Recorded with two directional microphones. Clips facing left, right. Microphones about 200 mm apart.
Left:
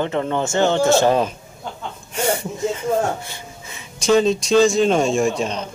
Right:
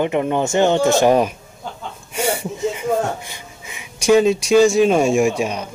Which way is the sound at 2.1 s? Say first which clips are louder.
Even; 10° right (ahead or behind).